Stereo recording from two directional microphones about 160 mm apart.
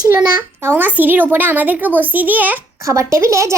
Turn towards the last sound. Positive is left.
turn(degrees=-20)  # may be behind; listen again after turning